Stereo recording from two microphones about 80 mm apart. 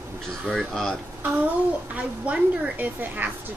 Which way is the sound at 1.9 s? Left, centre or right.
Centre.